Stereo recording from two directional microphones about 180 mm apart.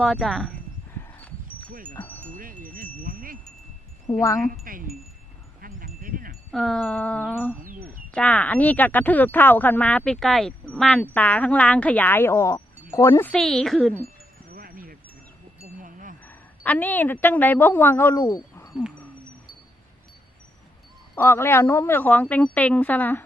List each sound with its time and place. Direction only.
0.0 s speech: centre (ahead or behind)
0.9 s a sound: 10° left (ahead or behind)
2.0 s chime: 10° left (ahead or behind)
2.3 s chime: 50° right (ahead or behind)
4.1 s speech: 15° left (ahead or behind)
4.6 s wind chime: 50° right (ahead or behind)
6.5 s speech: centre (ahead or behind)
7.6 s a sound: 50° right (ahead or behind)
8.1 s speech: 10° left (ahead or behind)
14.5 s a sound: 55° right (ahead or behind)
16.2 s a woman's voice: 10° left (ahead or behind)
18.7 s speech: 5° right (ahead or behind)
21.2 s speech: 15° left (ahead or behind)